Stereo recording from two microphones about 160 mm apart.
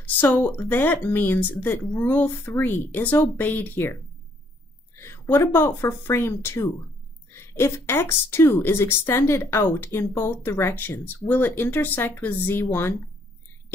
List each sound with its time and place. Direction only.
0.0 s speech: 15° left (ahead or behind)